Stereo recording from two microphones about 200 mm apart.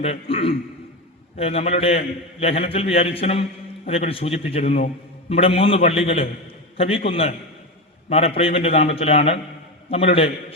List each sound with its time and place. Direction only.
0.0 s a man's voice: 30° left (ahead or behind)